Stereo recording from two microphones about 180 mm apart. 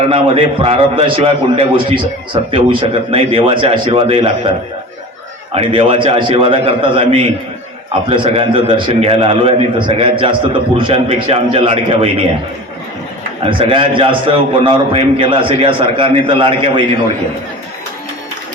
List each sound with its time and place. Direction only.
0.6 s a man's voice: 30° right (ahead or behind)
5.5 s a man's voice: 35° right (ahead or behind)
13.4 s a man's voice: 30° right (ahead or behind)